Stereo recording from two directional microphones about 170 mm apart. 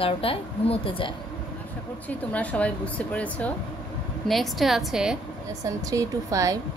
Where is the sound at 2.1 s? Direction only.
10° left (ahead or behind).